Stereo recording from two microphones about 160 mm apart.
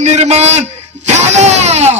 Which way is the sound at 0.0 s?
45° right (ahead or behind).